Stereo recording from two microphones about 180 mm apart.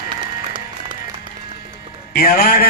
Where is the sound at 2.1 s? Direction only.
55° left (ahead or behind).